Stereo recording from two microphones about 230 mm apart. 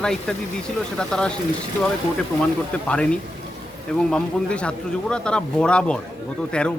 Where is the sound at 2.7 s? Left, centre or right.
Centre.